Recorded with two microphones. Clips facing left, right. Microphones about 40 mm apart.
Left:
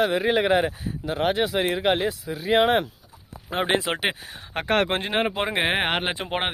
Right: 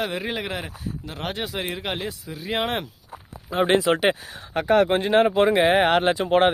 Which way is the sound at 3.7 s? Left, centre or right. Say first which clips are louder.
Right 5 dB; left.